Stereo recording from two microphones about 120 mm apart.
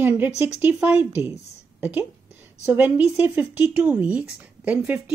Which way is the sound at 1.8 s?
15° right (ahead or behind).